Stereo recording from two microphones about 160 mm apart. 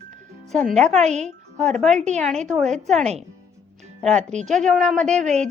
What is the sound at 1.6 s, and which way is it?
Speech, centre (ahead or behind).